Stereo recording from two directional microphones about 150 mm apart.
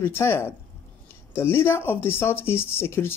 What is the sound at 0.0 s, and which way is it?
Speech, 15° left (ahead or behind).